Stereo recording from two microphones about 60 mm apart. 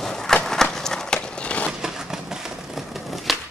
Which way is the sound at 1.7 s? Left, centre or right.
Centre.